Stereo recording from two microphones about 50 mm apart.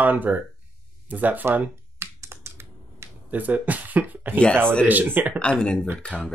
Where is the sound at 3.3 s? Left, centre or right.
Right.